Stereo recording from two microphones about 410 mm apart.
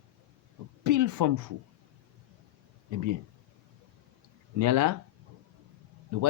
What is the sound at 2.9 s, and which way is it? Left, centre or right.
Speech, right.